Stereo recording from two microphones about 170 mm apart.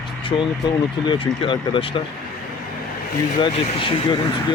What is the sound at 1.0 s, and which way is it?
Speech, 30° left (ahead or behind).